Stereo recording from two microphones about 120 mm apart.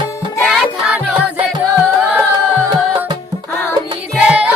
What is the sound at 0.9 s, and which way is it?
Music, 10° right (ahead or behind).